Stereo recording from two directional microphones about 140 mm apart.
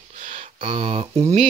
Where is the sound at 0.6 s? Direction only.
40° right (ahead or behind).